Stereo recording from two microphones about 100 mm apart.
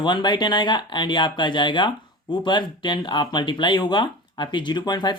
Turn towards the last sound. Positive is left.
turn(degrees=45)  # may be behind; listen again after turning